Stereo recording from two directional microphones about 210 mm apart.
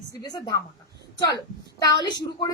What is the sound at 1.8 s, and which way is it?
Speech, 20° left (ahead or behind).